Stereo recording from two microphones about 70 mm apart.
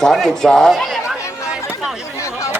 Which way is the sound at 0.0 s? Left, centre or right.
Centre.